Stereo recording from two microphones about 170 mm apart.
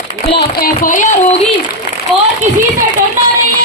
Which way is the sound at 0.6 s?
50° left (ahead or behind).